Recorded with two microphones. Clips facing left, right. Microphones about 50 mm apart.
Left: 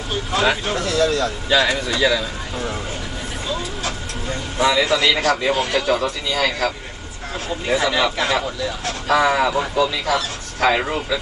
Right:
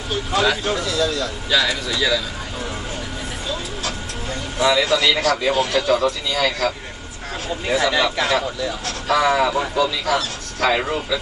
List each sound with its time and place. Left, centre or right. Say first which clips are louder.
0.4 s a man's voice: even; centre
0.7 s speech: left 2 dB; left
1.5 s speech: left 2 dB; left
4.6 s a man's voice: even; centre